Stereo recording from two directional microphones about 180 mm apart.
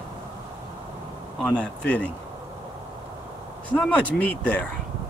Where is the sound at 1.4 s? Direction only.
5° left (ahead or behind).